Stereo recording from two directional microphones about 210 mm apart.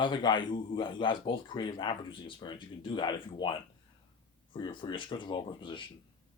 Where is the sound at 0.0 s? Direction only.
20° left (ahead or behind).